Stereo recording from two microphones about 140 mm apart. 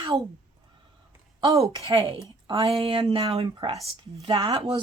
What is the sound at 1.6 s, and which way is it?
Speech, 40° right (ahead or behind).